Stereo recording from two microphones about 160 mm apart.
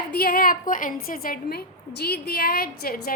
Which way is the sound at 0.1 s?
70° left (ahead or behind).